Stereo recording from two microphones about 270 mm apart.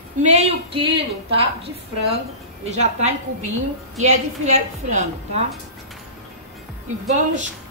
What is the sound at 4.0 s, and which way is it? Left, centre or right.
A woman's voice, right.